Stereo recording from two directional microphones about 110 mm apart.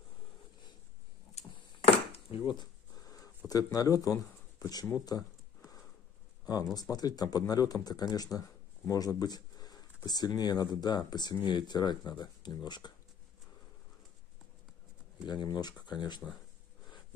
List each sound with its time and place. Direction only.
2.1 s a sound: 50° left (ahead or behind); by 4.8 s 35° left (ahead or behind)
4.8 s speech: 35° left (ahead or behind)
6.7 s speech: 35° left (ahead or behind)
15.2 s speech: 40° left (ahead or behind)